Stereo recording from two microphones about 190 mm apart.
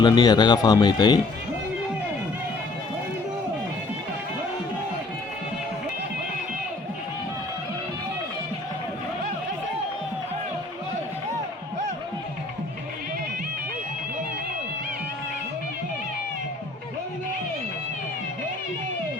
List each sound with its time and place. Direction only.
0.0 s speech: 20° left (ahead or behind)